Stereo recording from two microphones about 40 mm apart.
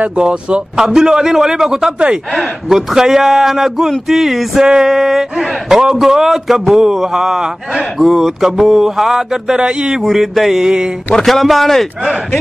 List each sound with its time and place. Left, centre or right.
0.2 s speech: right
0.8 s a sound: centre
9.6 s speech: right
10.0 s speech: centre
10.6 s speech: centre
11.2 s speech: centre